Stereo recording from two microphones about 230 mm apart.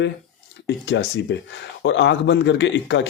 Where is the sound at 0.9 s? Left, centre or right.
Left.